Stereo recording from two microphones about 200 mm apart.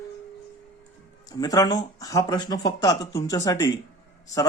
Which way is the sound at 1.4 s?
20° left (ahead or behind).